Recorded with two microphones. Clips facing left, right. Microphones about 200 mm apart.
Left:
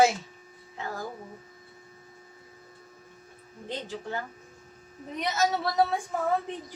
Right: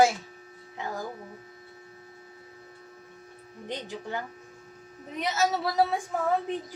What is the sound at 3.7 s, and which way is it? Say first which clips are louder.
Speech: even; 15° right (ahead or behind).